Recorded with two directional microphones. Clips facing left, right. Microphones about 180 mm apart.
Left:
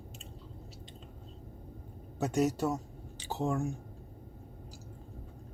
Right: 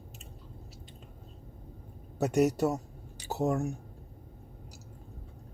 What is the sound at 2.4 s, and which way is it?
Speech, 15° right (ahead or behind).